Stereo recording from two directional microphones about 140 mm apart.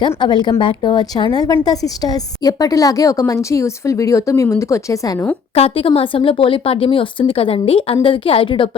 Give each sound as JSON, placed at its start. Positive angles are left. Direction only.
{"t": 0.2, "sound": "a woman's voice", "side_deg": 30}
{"t": 5.5, "sound": "speech", "side_deg": 45}